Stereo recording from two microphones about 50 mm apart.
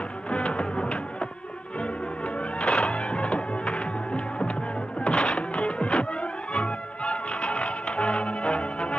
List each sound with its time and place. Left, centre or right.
0.3 s music: centre